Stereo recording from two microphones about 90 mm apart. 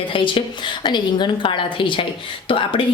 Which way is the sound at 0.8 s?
60° left (ahead or behind).